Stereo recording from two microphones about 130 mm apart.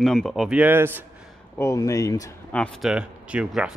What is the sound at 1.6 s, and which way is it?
Speech, 25° left (ahead or behind).